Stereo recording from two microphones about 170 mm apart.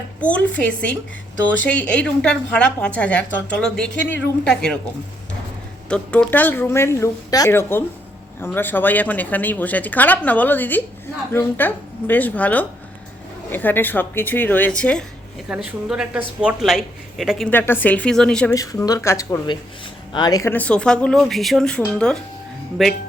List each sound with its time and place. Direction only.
0.2 s a woman's voice: 10° left (ahead or behind)
5.9 s a woman's voice: 5° left (ahead or behind)
15.4 s a woman's voice: 5° right (ahead or behind)
18.5 s a woman's voice: 20° left (ahead or behind); by 22.9 s centre (ahead or behind)